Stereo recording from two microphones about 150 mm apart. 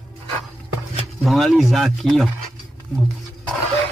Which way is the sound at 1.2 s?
Centre (ahead or behind).